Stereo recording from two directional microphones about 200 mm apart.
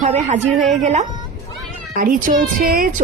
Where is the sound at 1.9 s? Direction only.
45° right (ahead or behind).